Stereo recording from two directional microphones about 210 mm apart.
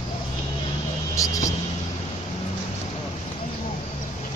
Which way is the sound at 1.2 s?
15° left (ahead or behind).